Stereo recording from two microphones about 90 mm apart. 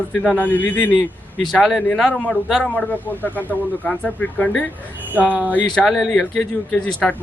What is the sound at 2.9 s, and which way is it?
Speech, 20° left (ahead or behind).